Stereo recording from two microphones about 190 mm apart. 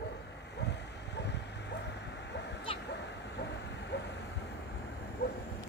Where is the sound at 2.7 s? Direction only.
30° left (ahead or behind).